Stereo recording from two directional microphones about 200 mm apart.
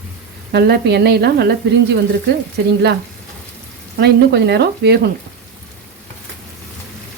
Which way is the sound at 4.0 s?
55° right (ahead or behind).